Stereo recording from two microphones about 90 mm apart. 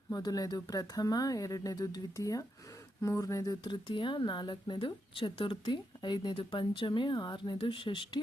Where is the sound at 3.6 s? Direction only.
65° left (ahead or behind).